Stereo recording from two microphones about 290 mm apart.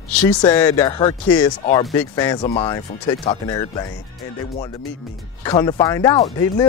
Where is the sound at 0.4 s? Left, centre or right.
Centre.